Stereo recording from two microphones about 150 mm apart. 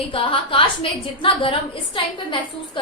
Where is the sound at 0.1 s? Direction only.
35° left (ahead or behind).